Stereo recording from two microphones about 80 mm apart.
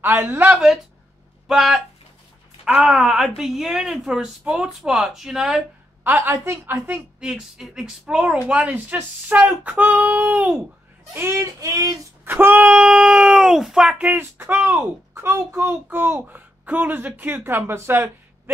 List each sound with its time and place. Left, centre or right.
0.0 s a child's voice: right
1.5 s speech: centre
6.0 s a woman's voice: right
7.2 s speech: centre
8.7 s a child's voice: right
11.1 s child singing: right
12.3 s speech: right; by 13.8 s centre
13.8 s a child's voice: centre; by 18.1 s right